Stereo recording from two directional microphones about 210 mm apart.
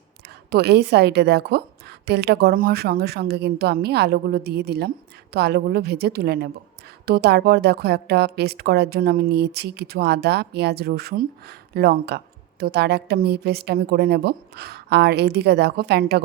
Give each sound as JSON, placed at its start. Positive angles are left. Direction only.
{"t": 0.5, "sound": "a woman's voice", "side_deg": -50}